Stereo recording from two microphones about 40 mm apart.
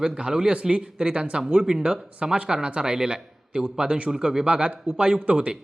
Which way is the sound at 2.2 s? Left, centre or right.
Right.